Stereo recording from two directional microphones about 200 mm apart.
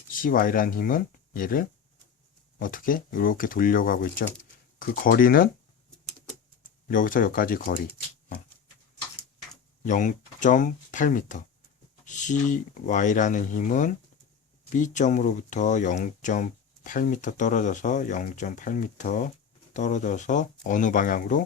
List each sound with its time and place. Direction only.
0.1 s speech: 45° left (ahead or behind)
6.8 s speech: 40° left (ahead or behind)
9.8 s speech: 40° left (ahead or behind)